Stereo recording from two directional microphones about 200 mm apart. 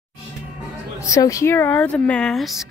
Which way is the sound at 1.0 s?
15° left (ahead or behind).